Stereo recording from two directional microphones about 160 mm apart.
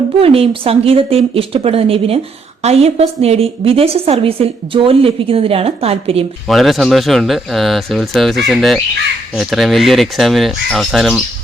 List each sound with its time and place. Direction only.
0.2 s a woman's voice: 35° right (ahead or behind)
6.5 s speech: centre (ahead or behind)